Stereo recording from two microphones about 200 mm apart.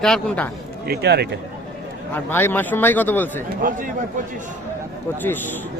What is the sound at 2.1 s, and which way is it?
Speech, 10° left (ahead or behind).